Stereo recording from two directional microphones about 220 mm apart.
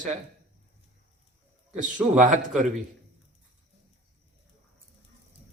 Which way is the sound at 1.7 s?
35° right (ahead or behind).